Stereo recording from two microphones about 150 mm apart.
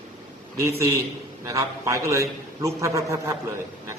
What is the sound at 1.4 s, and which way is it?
A man's voice, 20° right (ahead or behind).